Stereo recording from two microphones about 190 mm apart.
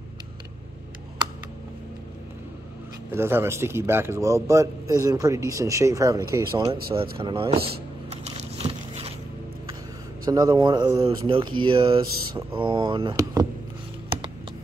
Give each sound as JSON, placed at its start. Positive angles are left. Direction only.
{"t": 3.1, "sound": "a man's voice", "side_deg": -15}
{"t": 8.1, "sound": "a sound", "side_deg": -35}
{"t": 10.2, "sound": "speech", "side_deg": -20}